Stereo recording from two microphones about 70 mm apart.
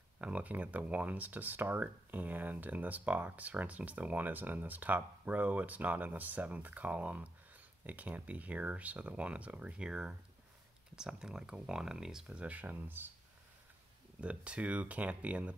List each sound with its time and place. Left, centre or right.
0.2 s speech: right
12.4 s speech: right
14.2 s speech: centre